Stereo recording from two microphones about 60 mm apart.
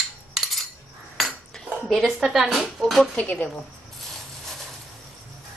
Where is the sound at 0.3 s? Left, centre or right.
Centre.